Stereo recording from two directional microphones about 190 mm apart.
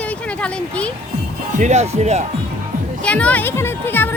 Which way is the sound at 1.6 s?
35° right (ahead or behind).